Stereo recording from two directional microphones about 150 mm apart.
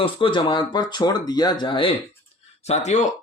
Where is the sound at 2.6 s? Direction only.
50° left (ahead or behind).